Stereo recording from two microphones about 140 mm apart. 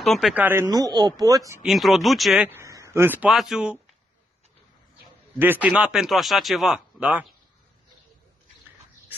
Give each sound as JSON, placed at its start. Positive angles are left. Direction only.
{"t": 0.0, "sound": "speech", "side_deg": 0}
{"t": 0.3, "sound": "speech", "side_deg": -15}
{"t": 0.7, "sound": "speech", "side_deg": -25}
{"t": 1.6, "sound": "speech", "side_deg": 0}
{"t": 2.4, "sound": "speech", "side_deg": -20}
{"t": 5.4, "sound": "speech", "side_deg": -15}
{"t": 5.7, "sound": "speech", "side_deg": -5}